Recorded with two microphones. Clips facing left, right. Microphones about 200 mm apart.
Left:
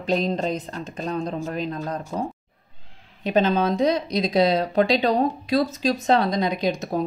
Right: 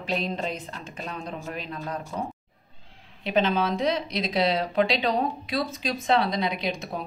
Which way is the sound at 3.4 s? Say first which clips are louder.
Left 4 dB; 40° left (ahead or behind).